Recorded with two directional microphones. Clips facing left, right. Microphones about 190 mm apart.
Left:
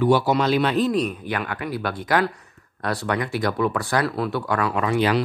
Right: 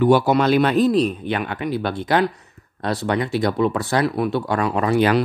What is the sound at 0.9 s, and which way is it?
Speech, 30° right (ahead or behind).